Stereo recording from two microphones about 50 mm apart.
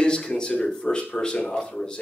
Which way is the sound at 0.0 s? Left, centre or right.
Centre.